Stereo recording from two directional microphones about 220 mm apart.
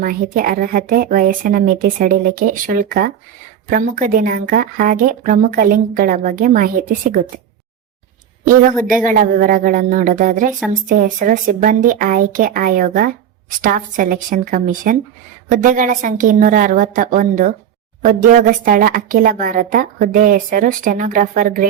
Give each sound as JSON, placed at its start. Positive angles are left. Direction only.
{"t": 0.0, "sound": "a woman's voice", "side_deg": -40}
{"t": 8.9, "sound": "a woman's voice", "side_deg": -35}